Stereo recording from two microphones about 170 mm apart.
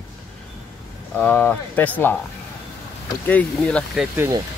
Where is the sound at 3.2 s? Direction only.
10° left (ahead or behind).